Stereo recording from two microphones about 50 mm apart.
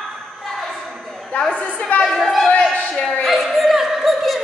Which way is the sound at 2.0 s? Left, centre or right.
Centre.